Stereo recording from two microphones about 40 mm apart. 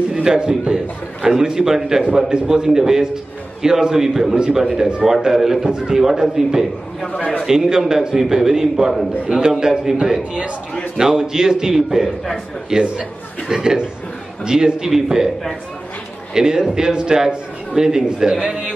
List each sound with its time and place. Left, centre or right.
0.1 s a man's voice: centre
7.1 s a man's voice: left
7.4 s a man's voice: centre
16.3 s a man's voice: centre